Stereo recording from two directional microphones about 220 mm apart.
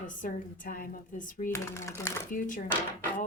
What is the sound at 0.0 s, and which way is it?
Speech, 35° left (ahead or behind).